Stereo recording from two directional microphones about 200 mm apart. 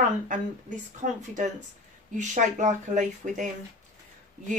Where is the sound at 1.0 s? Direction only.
35° right (ahead or behind).